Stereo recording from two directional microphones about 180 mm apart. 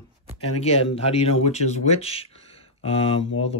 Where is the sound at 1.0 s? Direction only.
35° left (ahead or behind).